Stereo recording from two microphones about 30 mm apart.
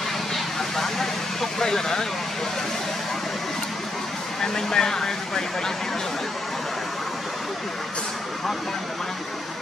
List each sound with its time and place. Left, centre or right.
0.7 s vehicle: centre
4.4 s speech: centre